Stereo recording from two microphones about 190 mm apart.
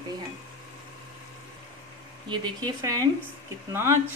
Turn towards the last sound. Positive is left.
turn(degrees=-15)  # may be behind; listen again after turning